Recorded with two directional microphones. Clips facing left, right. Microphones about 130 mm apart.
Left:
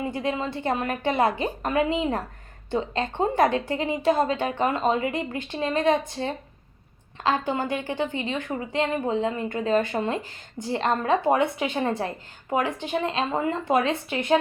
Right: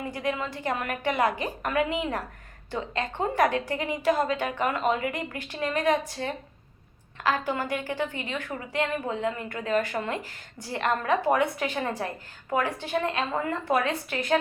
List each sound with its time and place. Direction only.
0.0 s a woman's voice: 25° left (ahead or behind)